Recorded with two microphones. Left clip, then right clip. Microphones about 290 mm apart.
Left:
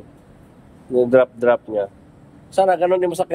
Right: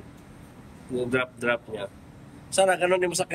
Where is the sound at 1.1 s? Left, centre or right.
Centre.